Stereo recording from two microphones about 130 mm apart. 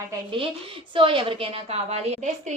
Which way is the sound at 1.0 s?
40° right (ahead or behind).